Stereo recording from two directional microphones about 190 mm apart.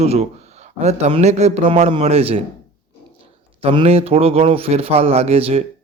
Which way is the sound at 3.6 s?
30° right (ahead or behind).